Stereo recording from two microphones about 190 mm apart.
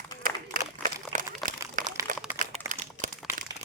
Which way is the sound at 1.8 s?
15° right (ahead or behind).